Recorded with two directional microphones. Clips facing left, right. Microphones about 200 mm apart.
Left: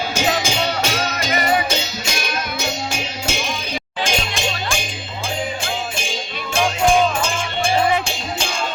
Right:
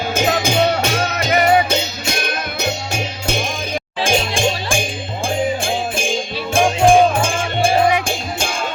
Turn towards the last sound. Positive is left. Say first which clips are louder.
# right 4 dB
turn(degrees=-50)  # may be behind; listen again after turning